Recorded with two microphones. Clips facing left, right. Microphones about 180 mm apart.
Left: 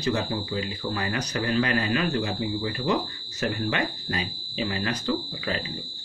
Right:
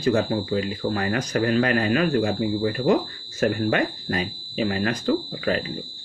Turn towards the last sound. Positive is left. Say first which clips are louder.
# right 6 dB
turn(degrees=-50)  # may be behind; listen again after turning